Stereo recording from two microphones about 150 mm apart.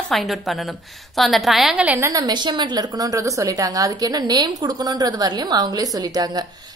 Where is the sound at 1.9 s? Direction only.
20° right (ahead or behind).